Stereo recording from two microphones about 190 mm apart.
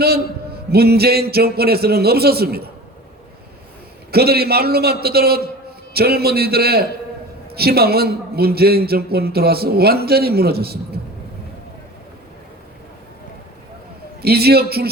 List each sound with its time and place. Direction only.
0.7 s a man's voice: 55° right (ahead or behind)
4.1 s a man's voice: 55° right (ahead or behind)
14.2 s a man's voice: 55° right (ahead or behind)